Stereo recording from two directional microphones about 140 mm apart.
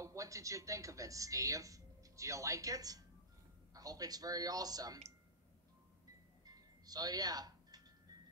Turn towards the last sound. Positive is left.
turn(degrees=-30)  # may be behind; listen again after turning